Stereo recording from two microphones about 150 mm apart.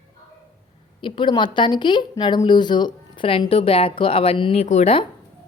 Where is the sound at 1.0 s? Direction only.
35° left (ahead or behind).